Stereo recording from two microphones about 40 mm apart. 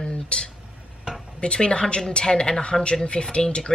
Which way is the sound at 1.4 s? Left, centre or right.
Left.